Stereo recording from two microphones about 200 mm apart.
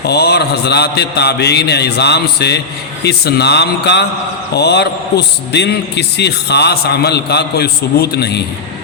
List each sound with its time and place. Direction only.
0.1 s a man's voice: 55° left (ahead or behind)